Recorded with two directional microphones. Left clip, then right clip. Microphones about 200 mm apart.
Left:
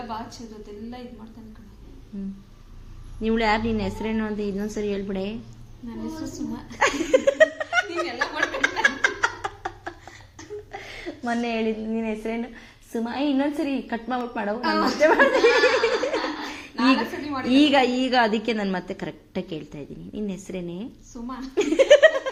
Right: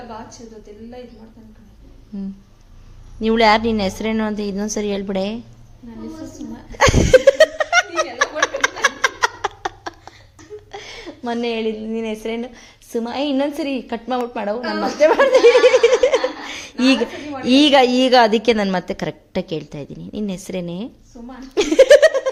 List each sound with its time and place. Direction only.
3.2 s a woman's voice: 50° right (ahead or behind)
6.7 s chuckle: 50° right (ahead or behind)
8.8 s laughter: 50° right (ahead or behind)
10.7 s a woman's voice: 35° right (ahead or behind)
14.6 s a woman's voice: 20° right (ahead or behind)
15.0 s a woman's voice: 40° right (ahead or behind)
17.5 s a woman's voice: 50° right (ahead or behind)
21.5 s laughter: 55° right (ahead or behind)